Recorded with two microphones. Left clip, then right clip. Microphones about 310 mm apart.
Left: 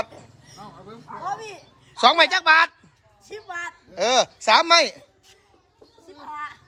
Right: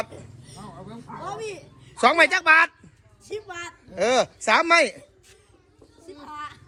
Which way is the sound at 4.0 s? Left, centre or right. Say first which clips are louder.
Left 1 dB; centre.